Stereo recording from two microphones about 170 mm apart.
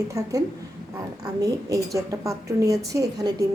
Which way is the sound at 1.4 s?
20° right (ahead or behind).